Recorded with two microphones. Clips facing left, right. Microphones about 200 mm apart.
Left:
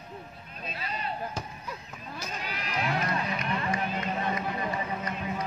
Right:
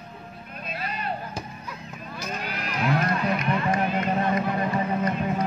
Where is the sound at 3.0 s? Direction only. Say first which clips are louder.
Right 6 dB; 60° right (ahead or behind).